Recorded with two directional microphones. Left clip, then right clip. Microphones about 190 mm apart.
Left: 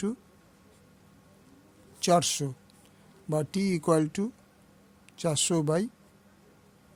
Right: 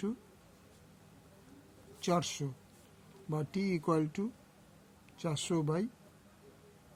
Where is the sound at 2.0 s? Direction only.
60° left (ahead or behind).